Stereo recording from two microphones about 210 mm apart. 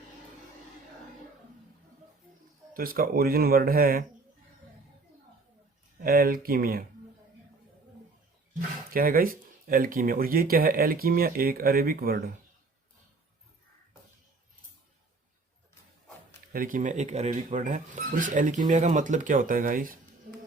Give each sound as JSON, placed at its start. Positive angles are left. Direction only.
{"t": 2.7, "sound": "speech", "side_deg": -45}
{"t": 6.0, "sound": "speech", "side_deg": -45}
{"t": 8.9, "sound": "speech", "side_deg": -45}
{"t": 16.5, "sound": "speech", "side_deg": -40}